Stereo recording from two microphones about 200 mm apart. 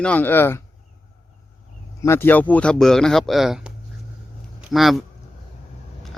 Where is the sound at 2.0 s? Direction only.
10° left (ahead or behind).